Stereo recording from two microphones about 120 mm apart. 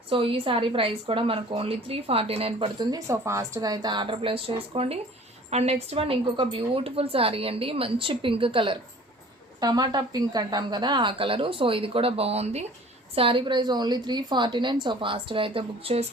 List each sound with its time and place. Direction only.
0.1 s a woman's voice: 50° right (ahead or behind)
2.9 s a woman's voice: 25° right (ahead or behind); by 8.8 s 45° right (ahead or behind)
9.6 s a woman's voice: 35° right (ahead or behind); by 12.6 s 60° right (ahead or behind)
13.1 s a woman's voice: 45° right (ahead or behind)